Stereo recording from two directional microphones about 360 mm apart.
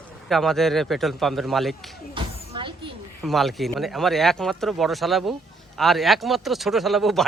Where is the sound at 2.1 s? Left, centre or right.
Centre.